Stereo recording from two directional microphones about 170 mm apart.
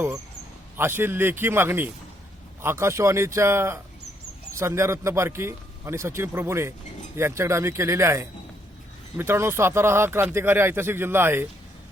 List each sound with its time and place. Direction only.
0.8 s speech: 15° right (ahead or behind)